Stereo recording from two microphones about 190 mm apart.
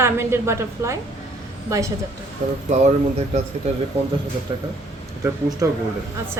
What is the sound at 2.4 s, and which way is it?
Speech, 40° right (ahead or behind).